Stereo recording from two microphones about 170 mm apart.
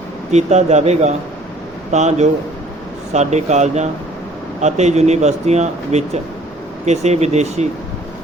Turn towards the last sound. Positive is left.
turn(degrees=-40)  # may be behind; listen again after turning